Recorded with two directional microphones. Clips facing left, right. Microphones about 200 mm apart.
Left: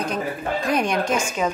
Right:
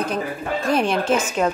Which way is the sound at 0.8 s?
15° left (ahead or behind).